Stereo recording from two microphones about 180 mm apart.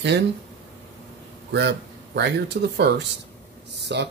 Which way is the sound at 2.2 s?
65° right (ahead or behind).